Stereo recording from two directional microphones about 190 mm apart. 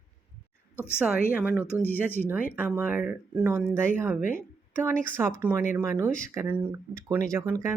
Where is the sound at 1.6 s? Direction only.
10° left (ahead or behind).